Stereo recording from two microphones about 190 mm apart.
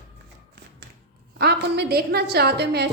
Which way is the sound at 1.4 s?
60° right (ahead or behind).